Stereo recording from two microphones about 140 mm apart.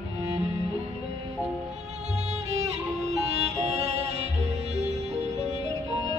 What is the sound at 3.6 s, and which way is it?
Music, 50° right (ahead or behind).